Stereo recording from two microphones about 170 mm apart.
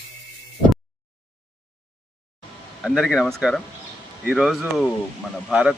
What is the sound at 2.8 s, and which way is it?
Speech, centre (ahead or behind).